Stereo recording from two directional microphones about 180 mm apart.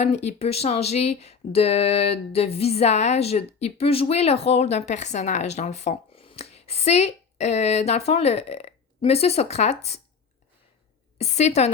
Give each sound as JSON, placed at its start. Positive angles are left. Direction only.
{"t": 0.0, "sound": "speech", "side_deg": 35}
{"t": 11.2, "sound": "speech", "side_deg": 40}